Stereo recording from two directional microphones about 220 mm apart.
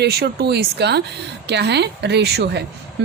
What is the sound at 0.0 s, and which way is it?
A woman's voice, 45° right (ahead or behind).